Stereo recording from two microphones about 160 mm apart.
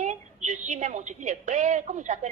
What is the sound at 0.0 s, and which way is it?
A woman's voice, 50° right (ahead or behind).